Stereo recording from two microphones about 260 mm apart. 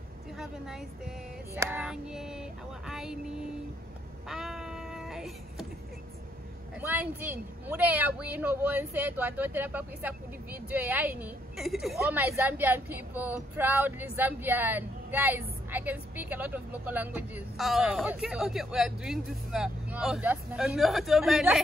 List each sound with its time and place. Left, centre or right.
0.4 s a woman's voice: centre
4.3 s a sound: centre
6.8 s a woman's voice: centre